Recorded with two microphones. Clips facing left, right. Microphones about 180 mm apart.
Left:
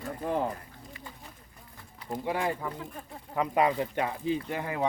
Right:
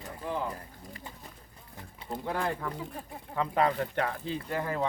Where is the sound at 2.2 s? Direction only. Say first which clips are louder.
Left 2 dB; 15° left (ahead or behind).